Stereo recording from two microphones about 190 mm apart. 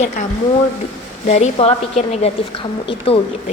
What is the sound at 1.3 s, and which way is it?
Speech, 35° left (ahead or behind).